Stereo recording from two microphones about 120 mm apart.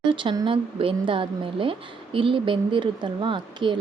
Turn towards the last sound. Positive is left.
turn(degrees=-40)  # may be behind; listen again after turning